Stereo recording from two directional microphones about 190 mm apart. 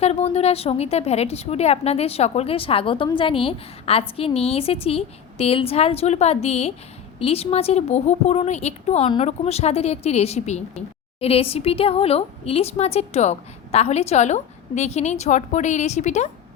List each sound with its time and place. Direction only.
0.0 s speech: 35° left (ahead or behind)